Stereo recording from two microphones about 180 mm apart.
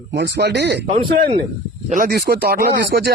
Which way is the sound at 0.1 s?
70° right (ahead or behind).